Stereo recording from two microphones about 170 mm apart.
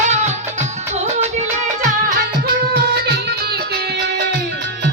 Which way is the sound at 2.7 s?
70° right (ahead or behind).